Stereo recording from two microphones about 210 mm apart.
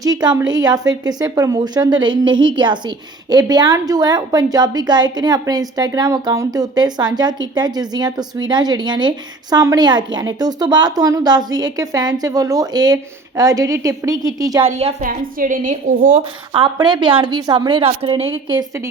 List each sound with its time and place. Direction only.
0.0 s a woman's voice: 20° right (ahead or behind)
14.6 s a woman's voice: 30° right (ahead or behind)
15.0 s a woman's voice: 40° right (ahead or behind)
16.5 s a woman's voice: 20° right (ahead or behind)